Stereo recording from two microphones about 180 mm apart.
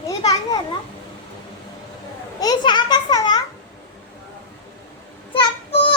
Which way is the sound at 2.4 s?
25° left (ahead or behind).